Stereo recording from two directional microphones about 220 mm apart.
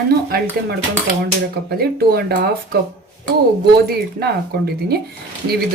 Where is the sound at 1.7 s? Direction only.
45° right (ahead or behind).